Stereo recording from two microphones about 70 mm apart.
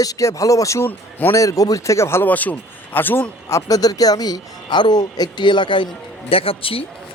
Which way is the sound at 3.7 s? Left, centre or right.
Left.